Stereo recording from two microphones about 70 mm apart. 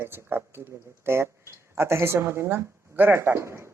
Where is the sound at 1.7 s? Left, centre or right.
Right.